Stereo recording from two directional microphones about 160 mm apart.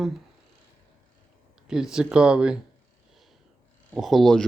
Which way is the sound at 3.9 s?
Centre (ahead or behind).